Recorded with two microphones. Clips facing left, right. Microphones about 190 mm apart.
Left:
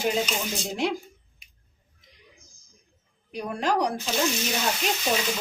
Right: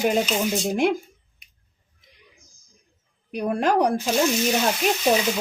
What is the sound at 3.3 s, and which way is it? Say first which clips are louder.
Speech: right 5 dB; 55° right (ahead or behind).